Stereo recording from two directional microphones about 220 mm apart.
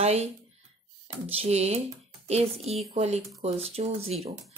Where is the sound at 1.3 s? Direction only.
30° right (ahead or behind).